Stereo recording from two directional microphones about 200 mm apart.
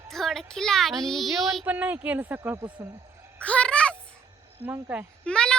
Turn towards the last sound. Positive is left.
turn(degrees=5)  # may be behind; listen again after turning